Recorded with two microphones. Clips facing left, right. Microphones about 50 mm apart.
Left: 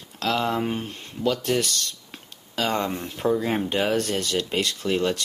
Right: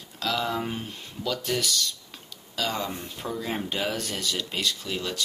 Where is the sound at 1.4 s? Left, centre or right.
Left.